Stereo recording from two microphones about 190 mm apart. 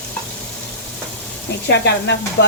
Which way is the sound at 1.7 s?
65° left (ahead or behind).